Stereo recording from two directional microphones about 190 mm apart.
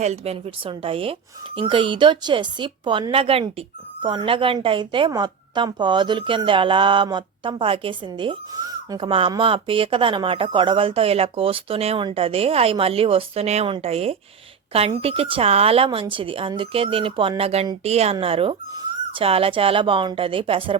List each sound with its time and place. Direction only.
0.0 s a woman's voice: 35° right (ahead or behind)